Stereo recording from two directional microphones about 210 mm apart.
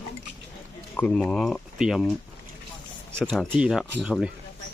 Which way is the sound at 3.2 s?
5° right (ahead or behind).